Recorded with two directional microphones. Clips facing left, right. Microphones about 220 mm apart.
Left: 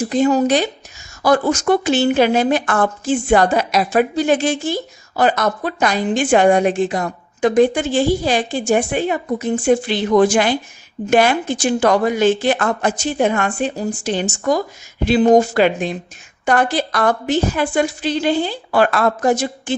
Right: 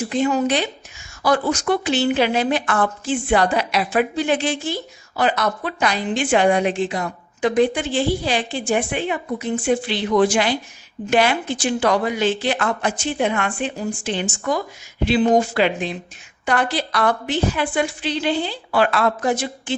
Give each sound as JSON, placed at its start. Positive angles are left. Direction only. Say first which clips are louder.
{"t": 0.1, "sound": "a woman's voice", "louder": "left 5 dB", "side_deg": 40}